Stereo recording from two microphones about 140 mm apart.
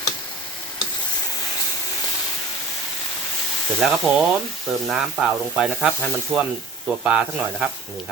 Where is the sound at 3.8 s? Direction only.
Centre (ahead or behind).